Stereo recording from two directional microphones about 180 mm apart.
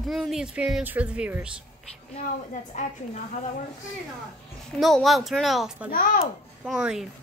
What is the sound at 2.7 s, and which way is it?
Speech, 40° left (ahead or behind).